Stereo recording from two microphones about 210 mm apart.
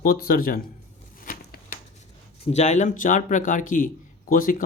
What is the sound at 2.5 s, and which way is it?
A man's voice, 35° left (ahead or behind).